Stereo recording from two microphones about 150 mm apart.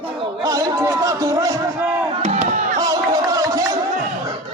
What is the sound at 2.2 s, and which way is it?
Chop, 55° right (ahead or behind).